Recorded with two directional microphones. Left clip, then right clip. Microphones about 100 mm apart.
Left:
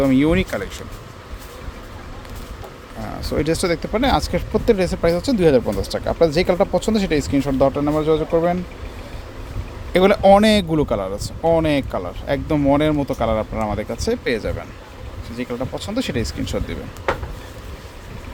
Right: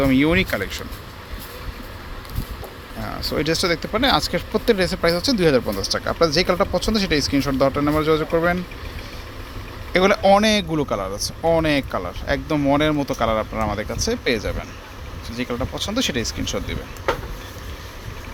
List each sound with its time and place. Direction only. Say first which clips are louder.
0.0 s speech: left 1 dB; 15° left (ahead or behind)
3.0 s speech: left 1 dB; 20° left (ahead or behind)
7.8 s speech: left 1 dB; 5° right (ahead or behind)
9.9 s speech: left 3 dB; 40° left (ahead or behind)
10.7 s speech: left 3 dB; 35° left (ahead or behind)
11.4 s speech: left 2 dB; 25° left (ahead or behind)
13.4 s speech: even; 5° left (ahead or behind)
13.9 s speech: left 1 dB; 40° left (ahead or behind)
15.4 s speech: even; 25° left (ahead or behind)